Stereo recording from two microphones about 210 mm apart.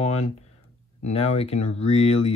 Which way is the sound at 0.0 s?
30° left (ahead or behind).